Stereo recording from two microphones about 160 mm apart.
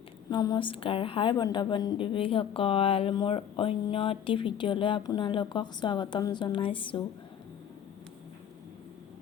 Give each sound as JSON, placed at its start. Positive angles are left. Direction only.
{"t": 0.3, "sound": "a woman's voice", "side_deg": 25}